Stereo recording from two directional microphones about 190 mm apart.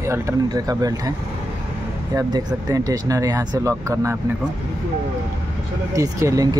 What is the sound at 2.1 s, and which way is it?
Speech, 20° right (ahead or behind).